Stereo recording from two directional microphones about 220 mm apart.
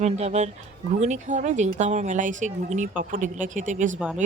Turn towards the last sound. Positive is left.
turn(degrees=-35)  # may be behind; listen again after turning